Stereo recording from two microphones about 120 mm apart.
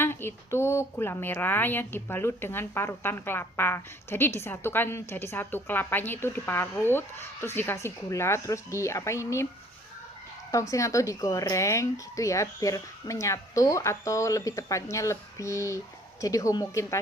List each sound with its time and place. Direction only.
0.0 s a woman's voice: 20° left (ahead or behind)
10.5 s a woman's voice: 25° left (ahead or behind)